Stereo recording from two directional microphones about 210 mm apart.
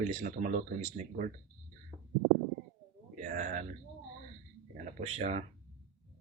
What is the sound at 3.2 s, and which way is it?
Speech, 40° right (ahead or behind).